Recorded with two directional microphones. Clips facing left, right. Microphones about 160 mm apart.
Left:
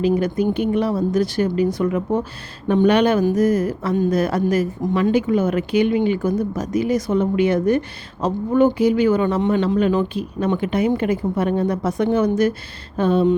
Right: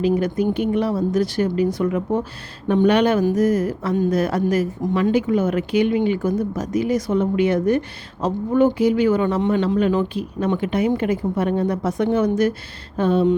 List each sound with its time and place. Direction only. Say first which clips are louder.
0.0 s speech: left 1 dB; 30° left (ahead or behind)